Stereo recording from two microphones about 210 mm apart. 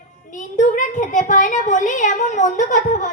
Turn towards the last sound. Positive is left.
turn(degrees=35)  # may be behind; listen again after turning